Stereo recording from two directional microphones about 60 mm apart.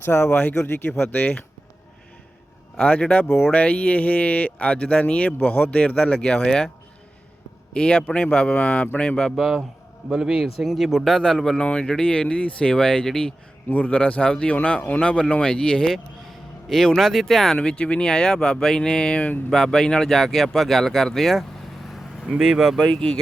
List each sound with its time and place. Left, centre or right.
0.0 s speech: left
0.3 s speech: left
2.7 s speech: left
7.7 s speech: centre
9.4 s speech: centre
11.0 s speech: centre
13.7 s speech: left; by 21.4 s centre
21.8 s vehicle: centre
22.4 s speech: centre